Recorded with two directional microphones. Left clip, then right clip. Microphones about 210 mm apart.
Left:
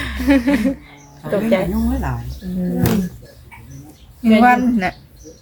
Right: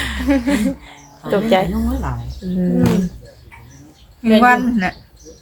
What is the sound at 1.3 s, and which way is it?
Speech, 40° right (ahead or behind).